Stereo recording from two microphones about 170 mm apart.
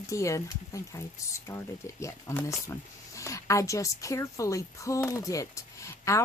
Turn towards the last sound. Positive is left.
turn(degrees=15)  # may be behind; listen again after turning